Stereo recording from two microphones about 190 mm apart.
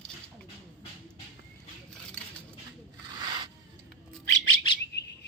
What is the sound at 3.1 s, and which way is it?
Rub, 25° right (ahead or behind).